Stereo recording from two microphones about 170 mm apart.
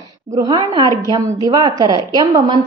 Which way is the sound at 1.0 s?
20° right (ahead or behind).